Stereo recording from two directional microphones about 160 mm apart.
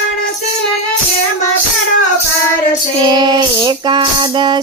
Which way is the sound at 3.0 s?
25° right (ahead or behind).